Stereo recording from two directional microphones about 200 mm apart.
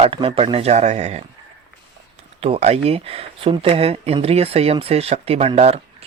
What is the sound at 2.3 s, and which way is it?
Speech, 30° right (ahead or behind).